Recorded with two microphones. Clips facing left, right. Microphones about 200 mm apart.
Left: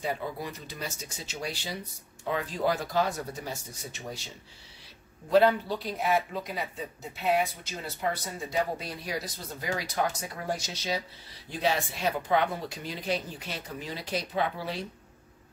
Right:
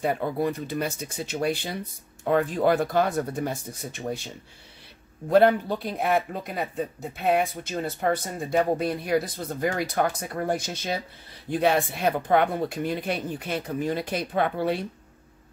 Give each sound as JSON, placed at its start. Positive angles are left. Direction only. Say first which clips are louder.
{"t": 0.0, "sound": "speech", "louder": "right 8 dB", "side_deg": -55}
{"t": 5.3, "sound": "speech", "louder": "right 4 dB", "side_deg": -55}